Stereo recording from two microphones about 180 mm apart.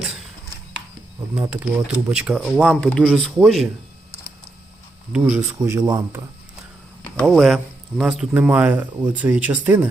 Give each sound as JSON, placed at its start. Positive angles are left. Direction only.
{"t": 1.4, "sound": "speech", "side_deg": -5}
{"t": 5.1, "sound": "speech", "side_deg": -5}
{"t": 5.5, "sound": "speech", "side_deg": -20}
{"t": 7.2, "sound": "speech", "side_deg": 0}